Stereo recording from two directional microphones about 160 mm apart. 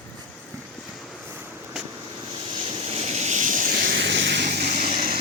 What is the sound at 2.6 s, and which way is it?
Vehicle, 40° right (ahead or behind).